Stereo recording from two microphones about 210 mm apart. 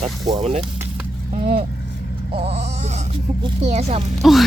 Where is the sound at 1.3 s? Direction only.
35° right (ahead or behind).